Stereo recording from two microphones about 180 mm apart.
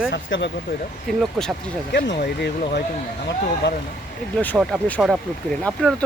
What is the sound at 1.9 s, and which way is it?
Speech, 70° left (ahead or behind).